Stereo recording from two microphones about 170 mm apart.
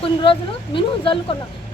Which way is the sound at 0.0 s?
30° left (ahead or behind).